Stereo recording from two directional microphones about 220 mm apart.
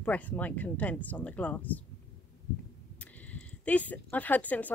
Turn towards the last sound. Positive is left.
turn(degrees=5)  # may be behind; listen again after turning